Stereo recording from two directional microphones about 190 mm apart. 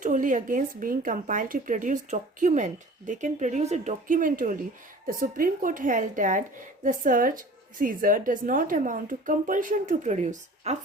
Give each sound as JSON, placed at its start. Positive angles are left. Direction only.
{"t": 0.0, "sound": "speech", "side_deg": -45}